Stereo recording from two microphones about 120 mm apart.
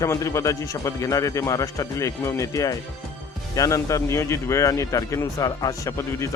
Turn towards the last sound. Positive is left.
turn(degrees=25)  # may be behind; listen again after turning